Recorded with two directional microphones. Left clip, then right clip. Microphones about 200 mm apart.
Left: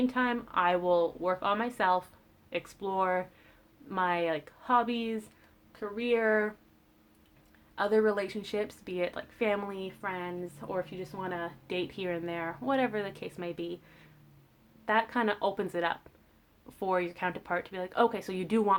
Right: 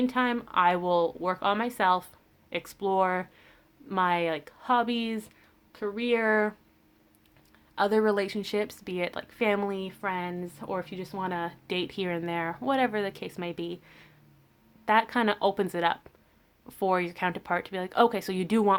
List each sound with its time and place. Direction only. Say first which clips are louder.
0.0 s speech: right 3 dB; 35° right (ahead or behind)
7.8 s speech: right 3 dB; 40° right (ahead or behind)